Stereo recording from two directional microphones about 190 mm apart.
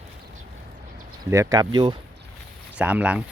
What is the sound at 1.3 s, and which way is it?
Speech, 15° right (ahead or behind).